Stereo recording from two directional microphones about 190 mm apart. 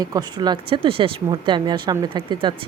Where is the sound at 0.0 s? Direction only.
20° right (ahead or behind).